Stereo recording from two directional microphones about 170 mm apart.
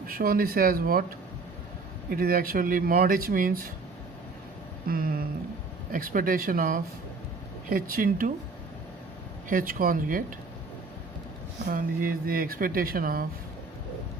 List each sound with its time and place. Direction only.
0.1 s speech: 60° right (ahead or behind)
2.0 s speech: 55° right (ahead or behind)
4.9 s speech: 60° right (ahead or behind)
9.5 s speech: 55° right (ahead or behind)
11.7 s speech: 55° right (ahead or behind)